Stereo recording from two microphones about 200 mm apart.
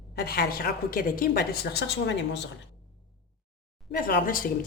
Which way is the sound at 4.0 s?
45° left (ahead or behind).